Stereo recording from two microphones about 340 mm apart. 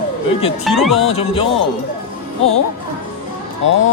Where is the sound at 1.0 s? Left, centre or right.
Centre.